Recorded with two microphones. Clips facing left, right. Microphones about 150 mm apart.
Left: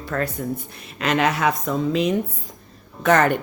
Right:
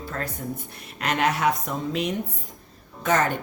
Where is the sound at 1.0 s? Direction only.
90° left.